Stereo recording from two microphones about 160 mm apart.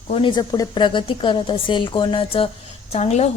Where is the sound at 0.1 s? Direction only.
30° left (ahead or behind).